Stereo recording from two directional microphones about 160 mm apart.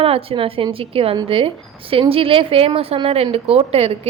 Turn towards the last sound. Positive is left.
turn(degrees=-40)  # may be behind; listen again after turning